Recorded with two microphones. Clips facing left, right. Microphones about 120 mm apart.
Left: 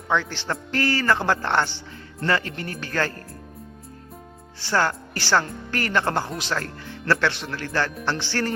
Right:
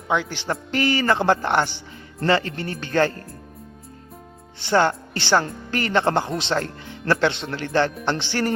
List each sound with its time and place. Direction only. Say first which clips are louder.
0.1 s speech: right 1 dB; 15° right (ahead or behind)
2.2 s speech: right 4 dB; 25° right (ahead or behind)
4.6 s speech: right 4 dB; 20° right (ahead or behind)